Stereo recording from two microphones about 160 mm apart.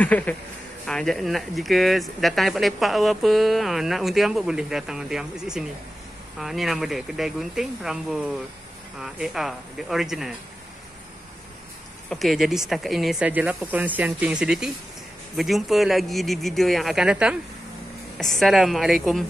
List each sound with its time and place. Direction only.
0.0 s speech: 10° left (ahead or behind)
12.1 s speech: centre (ahead or behind)